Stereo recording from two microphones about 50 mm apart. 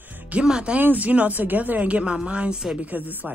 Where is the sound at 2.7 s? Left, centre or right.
Right.